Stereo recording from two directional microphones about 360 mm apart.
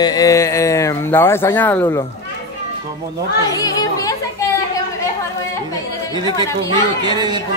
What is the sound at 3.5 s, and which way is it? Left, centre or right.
Speech, centre.